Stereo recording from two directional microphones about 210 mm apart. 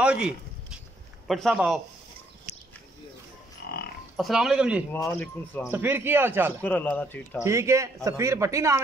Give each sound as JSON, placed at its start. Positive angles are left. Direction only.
{"t": 0.0, "sound": "a sound", "side_deg": -5}
{"t": 1.2, "sound": "speech", "side_deg": 0}
{"t": 3.6, "sound": "a sound", "side_deg": 45}
{"t": 4.2, "sound": "speech", "side_deg": 0}
{"t": 4.9, "sound": "speech", "side_deg": 5}
{"t": 5.7, "sound": "speech", "side_deg": -10}
{"t": 6.6, "sound": "speech", "side_deg": 10}
{"t": 7.4, "sound": "speech", "side_deg": -15}